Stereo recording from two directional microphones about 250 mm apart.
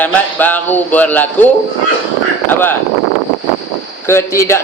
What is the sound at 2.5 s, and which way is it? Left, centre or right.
Speech, centre.